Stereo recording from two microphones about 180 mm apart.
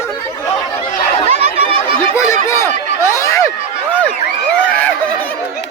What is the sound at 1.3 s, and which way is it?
Chatter, 35° right (ahead or behind).